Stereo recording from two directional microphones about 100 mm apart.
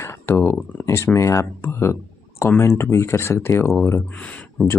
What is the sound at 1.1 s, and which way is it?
Speech, 30° left (ahead or behind).